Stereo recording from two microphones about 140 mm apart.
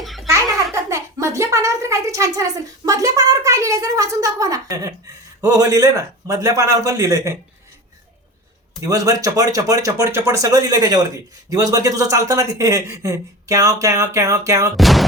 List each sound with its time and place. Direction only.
0.0 s baby laughter: centre (ahead or behind)
0.7 s a woman's voice: 20° right (ahead or behind)
8.8 s speech: 25° right (ahead or behind)
14.8 s a sound: centre (ahead or behind)